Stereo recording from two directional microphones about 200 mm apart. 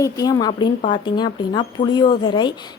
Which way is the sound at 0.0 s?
20° left (ahead or behind).